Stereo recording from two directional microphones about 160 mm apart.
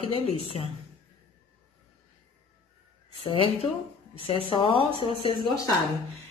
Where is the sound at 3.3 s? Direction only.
35° left (ahead or behind).